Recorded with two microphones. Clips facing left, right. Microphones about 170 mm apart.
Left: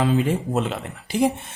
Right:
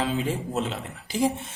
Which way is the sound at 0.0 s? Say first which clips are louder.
Left 6 dB; 55° left (ahead or behind).